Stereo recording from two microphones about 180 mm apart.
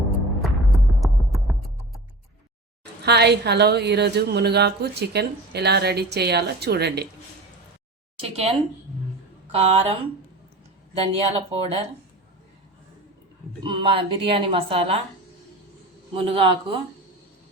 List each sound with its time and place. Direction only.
1.0 s music: centre (ahead or behind)
3.0 s a woman's voice: 65° right (ahead or behind)
8.2 s speech: 35° right (ahead or behind)
13.6 s a woman's voice: 30° right (ahead or behind)
16.1 s speech: 30° right (ahead or behind)